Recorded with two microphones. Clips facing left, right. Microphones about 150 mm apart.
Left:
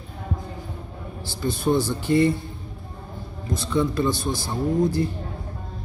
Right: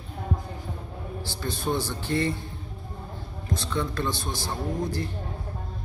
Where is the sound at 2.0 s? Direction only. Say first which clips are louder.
Left 8 dB; 15° left (ahead or behind).